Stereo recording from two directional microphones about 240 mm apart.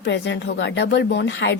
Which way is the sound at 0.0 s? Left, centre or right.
Left.